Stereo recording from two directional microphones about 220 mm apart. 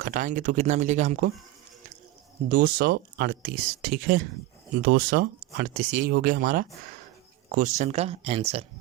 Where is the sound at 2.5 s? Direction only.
40° right (ahead or behind).